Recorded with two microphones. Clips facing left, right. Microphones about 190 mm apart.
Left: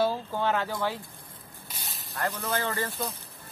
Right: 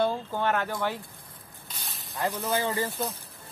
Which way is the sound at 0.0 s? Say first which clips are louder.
Even; 5° left (ahead or behind).